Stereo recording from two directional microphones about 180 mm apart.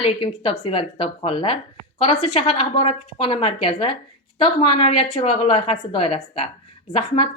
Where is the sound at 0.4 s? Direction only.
25° left (ahead or behind).